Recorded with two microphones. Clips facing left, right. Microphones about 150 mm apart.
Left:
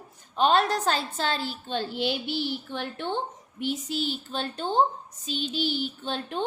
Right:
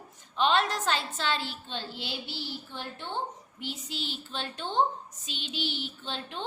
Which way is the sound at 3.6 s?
50° left (ahead or behind).